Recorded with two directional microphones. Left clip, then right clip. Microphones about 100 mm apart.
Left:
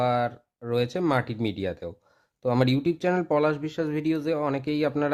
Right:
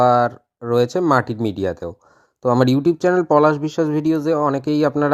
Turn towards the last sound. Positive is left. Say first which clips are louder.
# right 8 dB
turn(degrees=-50)  # may be behind; listen again after turning